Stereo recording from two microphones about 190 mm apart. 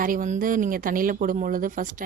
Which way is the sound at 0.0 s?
45° right (ahead or behind).